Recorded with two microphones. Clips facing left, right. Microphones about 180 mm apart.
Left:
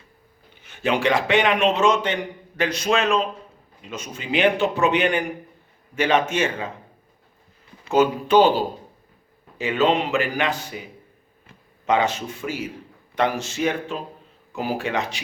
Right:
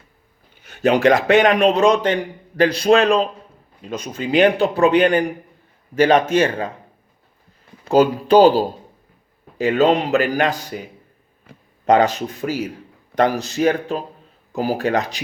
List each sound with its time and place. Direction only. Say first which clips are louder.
0.6 s a man's voice: right 7 dB; 40° right (ahead or behind)
7.9 s a man's voice: right 4 dB; 35° right (ahead or behind)
11.9 s a man's voice: right 6 dB; 40° right (ahead or behind)